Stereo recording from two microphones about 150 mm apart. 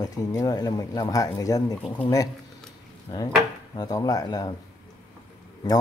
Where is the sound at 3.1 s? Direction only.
25° left (ahead or behind).